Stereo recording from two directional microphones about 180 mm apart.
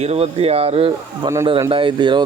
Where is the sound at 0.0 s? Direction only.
35° right (ahead or behind).